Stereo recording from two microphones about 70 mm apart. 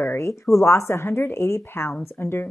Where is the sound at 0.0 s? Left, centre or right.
Left.